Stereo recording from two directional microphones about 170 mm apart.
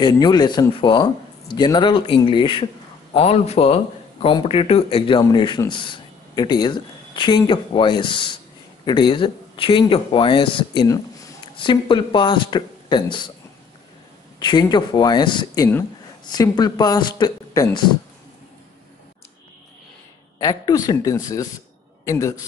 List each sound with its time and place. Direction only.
0.0 s speech: 25° left (ahead or behind)
14.4 s speech: 25° left (ahead or behind)
20.3 s a man's voice: 20° left (ahead or behind)